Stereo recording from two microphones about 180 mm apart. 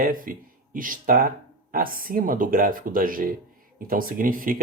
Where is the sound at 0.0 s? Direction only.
50° right (ahead or behind).